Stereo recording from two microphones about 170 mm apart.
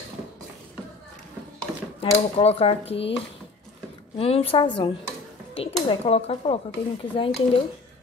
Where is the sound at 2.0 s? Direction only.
35° left (ahead or behind).